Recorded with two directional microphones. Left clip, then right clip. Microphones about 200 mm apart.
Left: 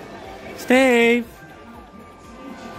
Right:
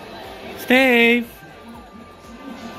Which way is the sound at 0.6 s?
10° left (ahead or behind).